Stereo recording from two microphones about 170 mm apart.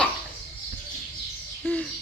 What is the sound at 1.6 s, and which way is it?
Bird, 5° left (ahead or behind).